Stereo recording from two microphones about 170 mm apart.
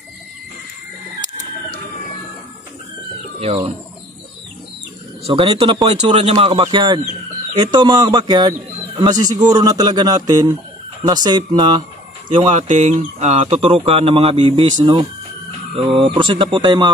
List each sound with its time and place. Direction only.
3.3 s speech: 35° right (ahead or behind)
5.2 s speech: 30° right (ahead or behind)
12.6 s speech: 45° right (ahead or behind); by 16.9 s 25° right (ahead or behind)